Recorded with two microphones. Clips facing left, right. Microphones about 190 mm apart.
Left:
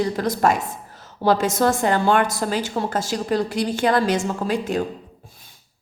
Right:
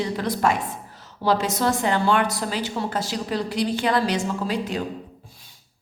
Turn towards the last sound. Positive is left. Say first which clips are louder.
# left 3 dB
turn(degrees=50)  # may be behind; listen again after turning